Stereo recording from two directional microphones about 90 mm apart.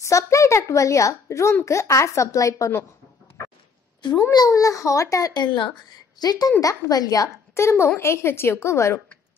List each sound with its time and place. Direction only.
0.0 s a child's voice: 35° left (ahead or behind)
3.4 s a sound: 35° left (ahead or behind)
4.0 s speech: 60° left (ahead or behind)
4.5 s a child's voice: 40° left (ahead or behind)
5.4 s speech: 60° left (ahead or behind)
6.1 s a woman's voice: 45° left (ahead or behind)
7.5 s a woman's voice: 30° left (ahead or behind)